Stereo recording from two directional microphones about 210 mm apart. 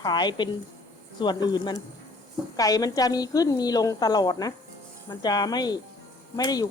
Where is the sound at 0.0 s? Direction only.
20° left (ahead or behind).